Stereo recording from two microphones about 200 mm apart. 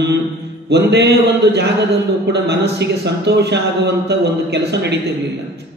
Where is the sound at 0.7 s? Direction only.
60° right (ahead or behind).